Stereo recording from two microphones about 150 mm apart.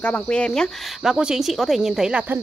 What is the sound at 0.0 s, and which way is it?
Speech, 10° left (ahead or behind).